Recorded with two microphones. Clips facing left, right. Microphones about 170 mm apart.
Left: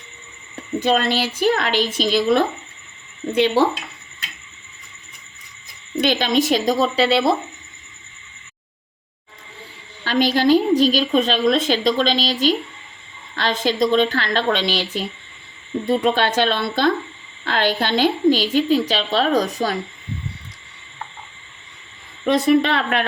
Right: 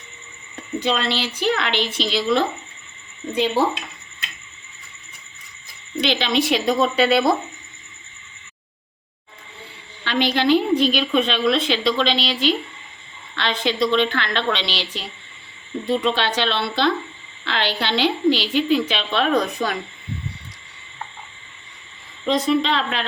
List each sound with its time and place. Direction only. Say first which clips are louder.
0.8 s a woman's voice: left 4 dB; 50° left (ahead or behind)
3.3 s speech: left 3 dB; 75° left (ahead or behind)
6.0 s a woman's voice: left 2 dB; 45° left (ahead or behind); by 7.3 s 30° left (ahead or behind)
10.0 s a woman's voice: left 3 dB; 40° left (ahead or behind)
22.3 s speech: left 3 dB; 65° left (ahead or behind)